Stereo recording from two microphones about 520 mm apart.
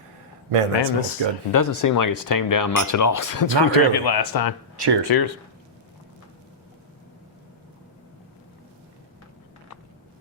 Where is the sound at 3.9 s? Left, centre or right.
Left.